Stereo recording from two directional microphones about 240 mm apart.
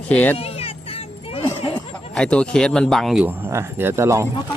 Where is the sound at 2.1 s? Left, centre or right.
Centre.